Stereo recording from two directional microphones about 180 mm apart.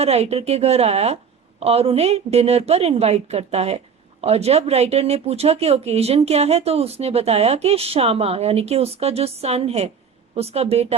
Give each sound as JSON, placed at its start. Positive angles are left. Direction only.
{"t": 0.0, "sound": "speech", "side_deg": -35}